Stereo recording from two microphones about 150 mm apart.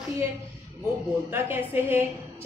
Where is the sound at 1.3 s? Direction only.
15° right (ahead or behind).